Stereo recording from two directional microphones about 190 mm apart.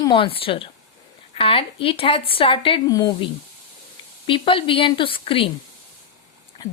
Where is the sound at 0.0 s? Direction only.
25° left (ahead or behind).